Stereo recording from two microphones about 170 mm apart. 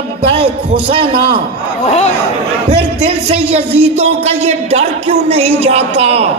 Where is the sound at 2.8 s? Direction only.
35° right (ahead or behind).